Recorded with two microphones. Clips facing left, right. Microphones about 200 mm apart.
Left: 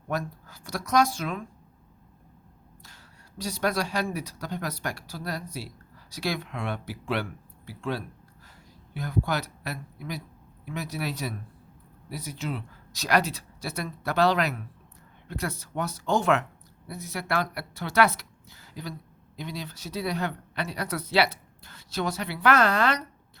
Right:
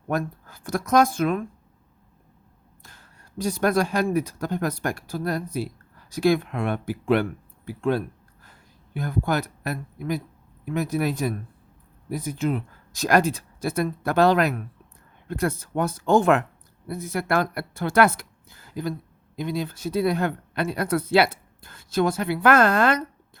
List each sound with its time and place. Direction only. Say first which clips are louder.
0.1 s speech: right 5 dB; 50° right (ahead or behind)
2.8 s speech: right 4 dB; 50° right (ahead or behind)